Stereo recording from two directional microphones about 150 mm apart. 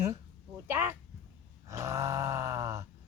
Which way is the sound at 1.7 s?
20° right (ahead or behind).